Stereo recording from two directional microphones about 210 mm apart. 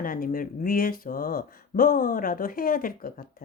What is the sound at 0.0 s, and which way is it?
A woman's voice, 40° left (ahead or behind).